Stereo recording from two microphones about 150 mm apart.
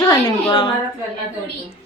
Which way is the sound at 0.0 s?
30° left (ahead or behind).